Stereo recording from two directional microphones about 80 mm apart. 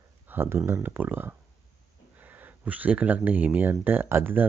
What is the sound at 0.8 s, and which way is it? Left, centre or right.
Speech, right.